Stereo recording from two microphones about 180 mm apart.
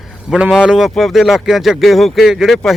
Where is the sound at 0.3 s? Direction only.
5° right (ahead or behind).